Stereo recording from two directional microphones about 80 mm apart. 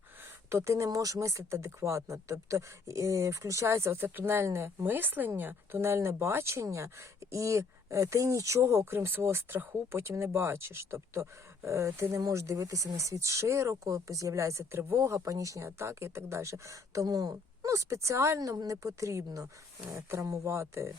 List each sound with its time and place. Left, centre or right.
0.5 s speech: right
0.9 s speech: right
18.3 s a woman's voice: right